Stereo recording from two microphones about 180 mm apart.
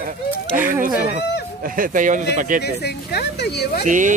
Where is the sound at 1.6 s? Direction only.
50° right (ahead or behind).